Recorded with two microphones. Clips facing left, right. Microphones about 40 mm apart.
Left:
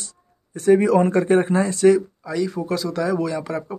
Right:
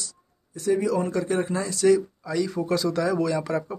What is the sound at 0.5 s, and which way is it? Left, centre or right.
Speech, left.